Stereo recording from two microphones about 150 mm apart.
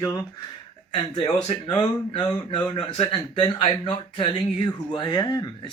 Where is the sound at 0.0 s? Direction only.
25° left (ahead or behind).